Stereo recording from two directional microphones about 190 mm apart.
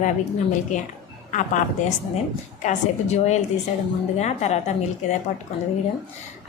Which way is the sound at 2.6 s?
35° left (ahead or behind).